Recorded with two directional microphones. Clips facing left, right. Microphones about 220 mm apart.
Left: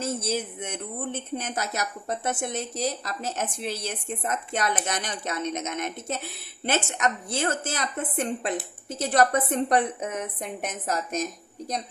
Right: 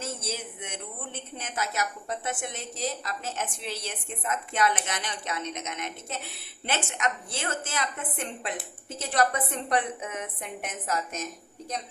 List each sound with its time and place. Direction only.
0.2 s speech: 40° left (ahead or behind)